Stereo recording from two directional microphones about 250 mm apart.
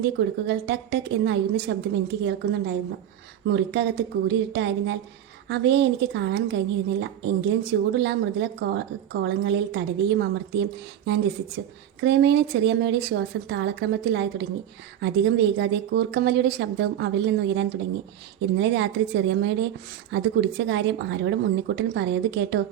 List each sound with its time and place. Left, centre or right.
0.0 s a woman's voice: right